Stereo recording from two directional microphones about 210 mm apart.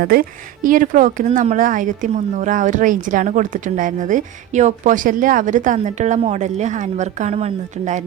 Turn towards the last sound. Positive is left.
turn(degrees=-35)  # may be behind; listen again after turning